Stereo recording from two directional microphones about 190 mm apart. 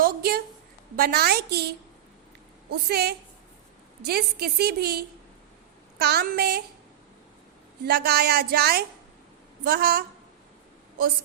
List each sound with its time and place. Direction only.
0.0 s a sound: 55° right (ahead or behind)
0.9 s a woman's voice: 50° right (ahead or behind)
6.0 s a woman's voice: 55° right (ahead or behind)
7.9 s a woman's voice: 55° right (ahead or behind)